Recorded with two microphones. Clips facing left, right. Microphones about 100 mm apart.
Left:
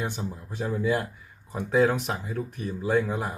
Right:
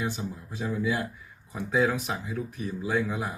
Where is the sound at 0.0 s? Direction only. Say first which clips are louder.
Even; 45° left (ahead or behind).